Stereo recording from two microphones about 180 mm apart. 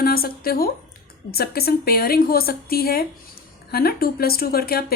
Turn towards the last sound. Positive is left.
turn(degrees=55)  # may be behind; listen again after turning